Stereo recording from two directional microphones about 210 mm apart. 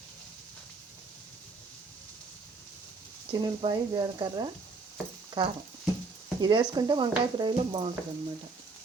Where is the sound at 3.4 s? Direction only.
20° right (ahead or behind).